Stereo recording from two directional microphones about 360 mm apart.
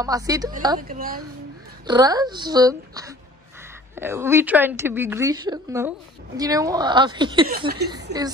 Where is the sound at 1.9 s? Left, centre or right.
Centre.